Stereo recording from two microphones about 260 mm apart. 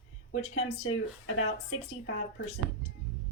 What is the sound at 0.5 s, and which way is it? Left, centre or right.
Speech, left.